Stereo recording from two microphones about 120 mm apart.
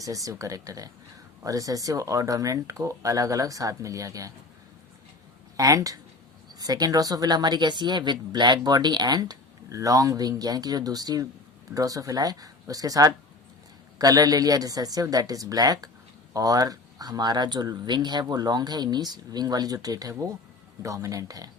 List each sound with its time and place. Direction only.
0.0 s speech: 30° right (ahead or behind)
5.5 s speech: 30° right (ahead or behind)